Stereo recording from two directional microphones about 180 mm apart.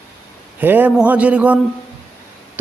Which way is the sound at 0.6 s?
10° right (ahead or behind).